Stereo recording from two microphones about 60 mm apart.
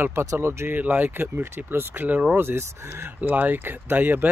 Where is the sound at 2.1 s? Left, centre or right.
Right.